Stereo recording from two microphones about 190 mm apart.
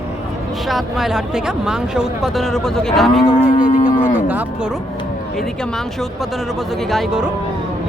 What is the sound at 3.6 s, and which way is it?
Livestock, 45° left (ahead or behind).